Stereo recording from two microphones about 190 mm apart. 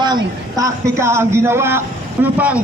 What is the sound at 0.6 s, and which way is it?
Speech, 15° right (ahead or behind).